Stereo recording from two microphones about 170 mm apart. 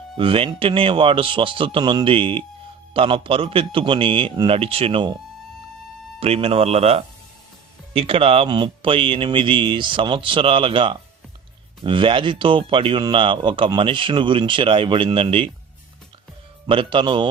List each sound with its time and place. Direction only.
0.2 s speech: 30° right (ahead or behind)
6.1 s speech: 35° right (ahead or behind)
16.6 s speech: 30° right (ahead or behind)